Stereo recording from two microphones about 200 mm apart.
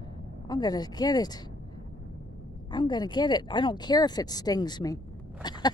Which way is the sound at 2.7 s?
20° left (ahead or behind).